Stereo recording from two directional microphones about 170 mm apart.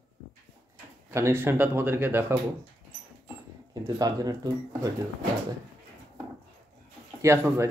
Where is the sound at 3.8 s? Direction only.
20° right (ahead or behind).